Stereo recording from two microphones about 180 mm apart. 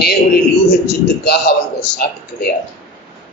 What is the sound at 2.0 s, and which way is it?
Speech, 55° left (ahead or behind).